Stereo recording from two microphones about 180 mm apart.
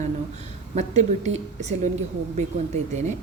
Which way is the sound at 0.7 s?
40° right (ahead or behind).